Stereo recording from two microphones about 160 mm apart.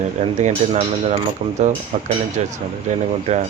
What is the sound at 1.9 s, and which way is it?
Speech, 50° right (ahead or behind).